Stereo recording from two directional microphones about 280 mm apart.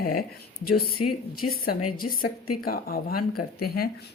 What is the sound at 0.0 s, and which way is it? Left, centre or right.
Speech, left.